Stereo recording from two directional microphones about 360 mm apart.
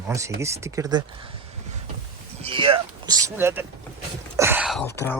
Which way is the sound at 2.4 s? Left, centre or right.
Centre.